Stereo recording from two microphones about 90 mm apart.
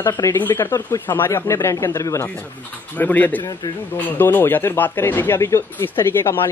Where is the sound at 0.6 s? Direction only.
40° left (ahead or behind).